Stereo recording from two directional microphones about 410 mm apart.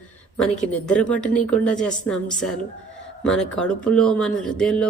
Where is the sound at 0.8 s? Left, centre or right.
Centre.